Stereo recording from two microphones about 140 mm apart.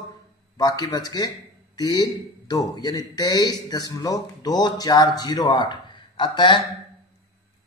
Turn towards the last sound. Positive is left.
turn(degrees=35)  # may be behind; listen again after turning